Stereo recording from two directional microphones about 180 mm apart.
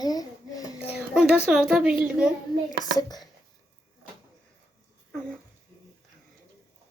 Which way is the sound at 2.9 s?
20° left (ahead or behind).